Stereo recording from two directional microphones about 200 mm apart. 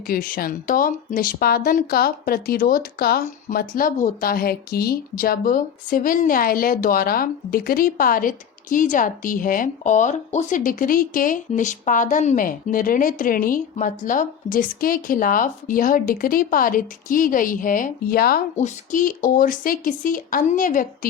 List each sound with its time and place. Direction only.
0.1 s speech: 45° left (ahead or behind)